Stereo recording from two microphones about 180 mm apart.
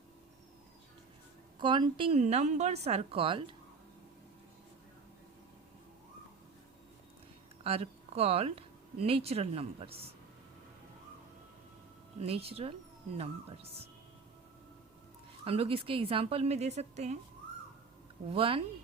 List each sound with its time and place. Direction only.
1.5 s a woman's voice: 25° right (ahead or behind)
7.6 s speech: 35° right (ahead or behind)
12.5 s a woman's voice: 35° right (ahead or behind)
15.4 s a woman's voice: 30° right (ahead or behind)
18.3 s a woman's voice: 30° right (ahead or behind)